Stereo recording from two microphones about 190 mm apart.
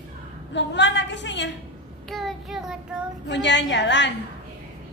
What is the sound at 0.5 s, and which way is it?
A woman's voice, 70° left (ahead or behind).